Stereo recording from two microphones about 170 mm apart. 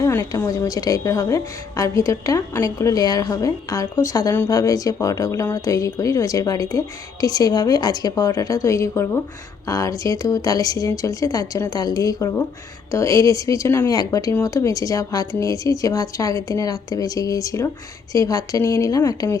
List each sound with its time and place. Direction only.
0.0 s a woman's voice: 20° left (ahead or behind)